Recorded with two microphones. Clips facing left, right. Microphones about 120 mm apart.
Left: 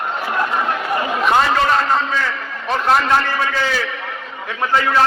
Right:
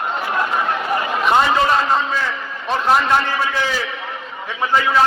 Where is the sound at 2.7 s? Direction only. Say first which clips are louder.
Even; 5° right (ahead or behind).